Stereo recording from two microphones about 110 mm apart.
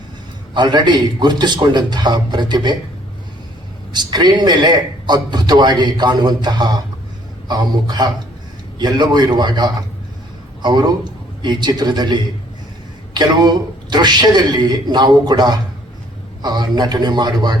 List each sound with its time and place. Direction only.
0.5 s a man's voice: 40° right (ahead or behind)
3.9 s a man's voice: 40° right (ahead or behind)